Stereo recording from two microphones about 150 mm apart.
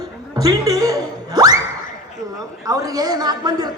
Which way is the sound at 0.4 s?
25° right (ahead or behind).